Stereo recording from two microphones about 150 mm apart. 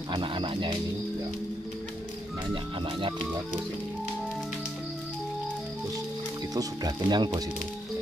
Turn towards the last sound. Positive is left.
turn(degrees=-25)  # may be behind; listen again after turning